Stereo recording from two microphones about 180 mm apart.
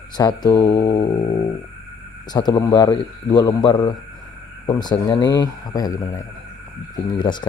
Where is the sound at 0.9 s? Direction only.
30° left (ahead or behind).